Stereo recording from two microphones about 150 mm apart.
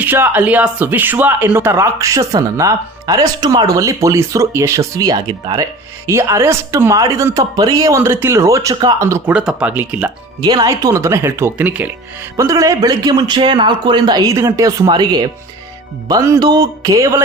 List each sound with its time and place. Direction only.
0.0 s speech: 10° right (ahead or behind); by 5.6 s 30° right (ahead or behind)
6.1 s speech: 20° right (ahead or behind)
9.3 s speech: 5° right (ahead or behind)
10.4 s speech: 30° right (ahead or behind)